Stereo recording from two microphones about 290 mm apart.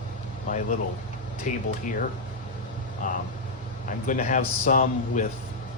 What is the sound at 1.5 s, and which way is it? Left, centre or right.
Speech, left.